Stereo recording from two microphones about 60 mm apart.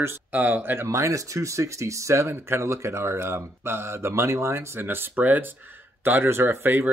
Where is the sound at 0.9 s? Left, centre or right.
Right.